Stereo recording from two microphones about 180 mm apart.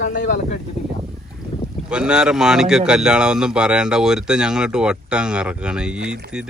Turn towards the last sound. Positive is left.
turn(degrees=-5)  # may be behind; listen again after turning